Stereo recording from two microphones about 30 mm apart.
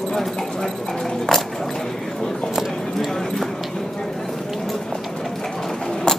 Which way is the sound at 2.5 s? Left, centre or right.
Centre.